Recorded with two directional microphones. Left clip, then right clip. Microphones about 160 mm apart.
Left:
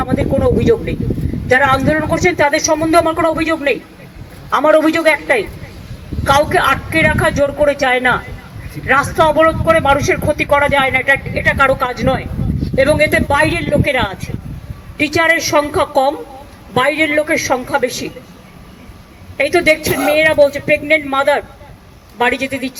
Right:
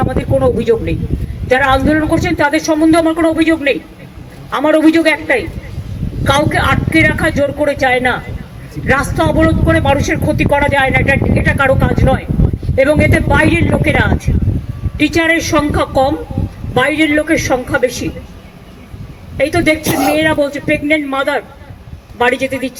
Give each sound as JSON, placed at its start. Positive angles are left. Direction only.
{"t": 0.0, "sound": "speech", "side_deg": 25}
{"t": 19.4, "sound": "speech", "side_deg": 30}
{"t": 19.8, "sound": "speech", "side_deg": -30}
{"t": 20.1, "sound": "speech", "side_deg": 30}